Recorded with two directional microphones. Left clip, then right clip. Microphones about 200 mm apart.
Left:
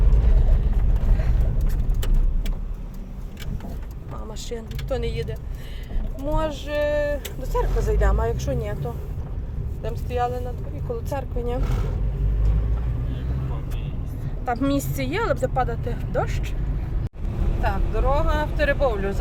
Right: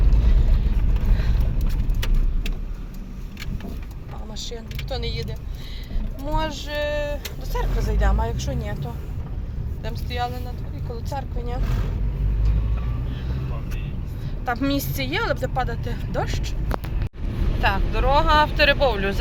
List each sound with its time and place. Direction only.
4.5 s vehicle: 10° left (ahead or behind)
6.3 s speech: 5° left (ahead or behind)
14.4 s speech: centre (ahead or behind)
17.6 s speech: 5° left (ahead or behind)